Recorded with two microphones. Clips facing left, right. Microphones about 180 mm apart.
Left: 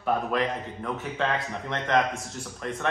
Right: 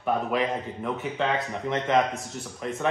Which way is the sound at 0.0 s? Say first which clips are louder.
Even; 5° right (ahead or behind).